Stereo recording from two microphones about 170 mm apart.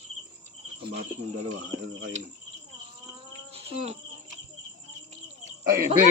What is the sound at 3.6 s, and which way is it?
Cricket, 35° right (ahead or behind).